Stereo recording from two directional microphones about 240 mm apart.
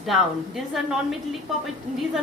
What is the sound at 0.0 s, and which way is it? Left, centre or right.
A woman's voice, centre.